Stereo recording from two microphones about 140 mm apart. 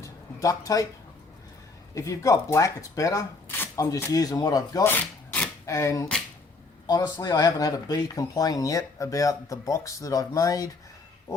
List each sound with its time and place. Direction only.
0.0 s a sound: 25° left (ahead or behind)
2.0 s speech: 25° left (ahead or behind)
3.5 s chopping: 15° left (ahead or behind)
4.1 s speech: 25° left (ahead or behind)
4.9 s rub: 10° left (ahead or behind)
5.6 s speech: 25° left (ahead or behind)